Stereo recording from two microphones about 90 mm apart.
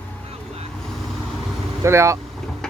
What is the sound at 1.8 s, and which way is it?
Speech, 30° right (ahead or behind).